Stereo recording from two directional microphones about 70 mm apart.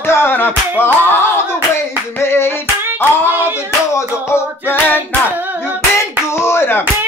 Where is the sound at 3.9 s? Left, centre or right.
Left.